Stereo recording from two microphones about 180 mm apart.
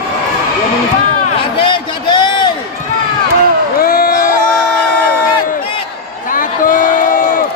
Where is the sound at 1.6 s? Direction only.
25° left (ahead or behind).